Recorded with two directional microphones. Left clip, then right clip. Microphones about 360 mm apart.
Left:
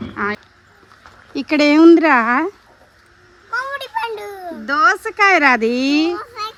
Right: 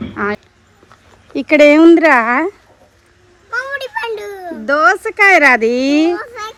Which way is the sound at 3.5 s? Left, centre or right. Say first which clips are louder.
Right 2 dB; centre.